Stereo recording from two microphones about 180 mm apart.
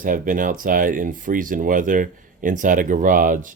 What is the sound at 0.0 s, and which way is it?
Speech, 50° right (ahead or behind).